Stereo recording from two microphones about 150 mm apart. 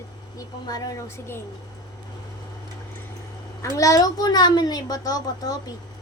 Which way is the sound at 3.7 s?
25° left (ahead or behind).